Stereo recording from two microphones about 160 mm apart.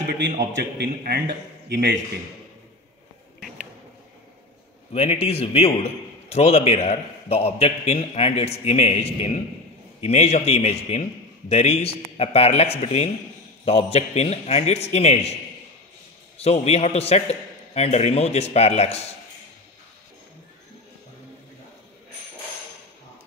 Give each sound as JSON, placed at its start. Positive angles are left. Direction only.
{"t": 0.7, "sound": "a man's voice", "side_deg": -80}
{"t": 3.3, "sound": "a sound", "side_deg": 0}
{"t": 4.9, "sound": "a man's voice", "side_deg": 40}
{"t": 16.3, "sound": "a man's voice", "side_deg": 40}